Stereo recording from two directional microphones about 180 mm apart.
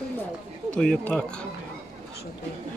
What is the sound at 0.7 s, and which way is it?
Speech, 5° left (ahead or behind).